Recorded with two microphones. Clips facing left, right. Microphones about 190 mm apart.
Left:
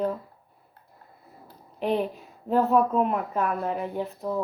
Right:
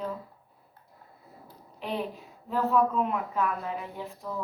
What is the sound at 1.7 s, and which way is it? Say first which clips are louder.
A woman's voice: left 7 dB; 55° left (ahead or behind).